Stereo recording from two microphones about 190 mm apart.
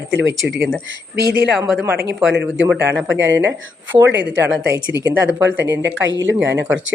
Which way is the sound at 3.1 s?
75° right (ahead or behind).